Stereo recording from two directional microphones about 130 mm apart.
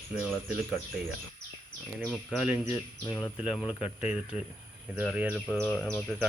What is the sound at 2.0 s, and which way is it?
Bird, centre (ahead or behind).